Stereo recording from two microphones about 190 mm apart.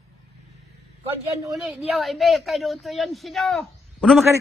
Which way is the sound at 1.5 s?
Centre (ahead or behind).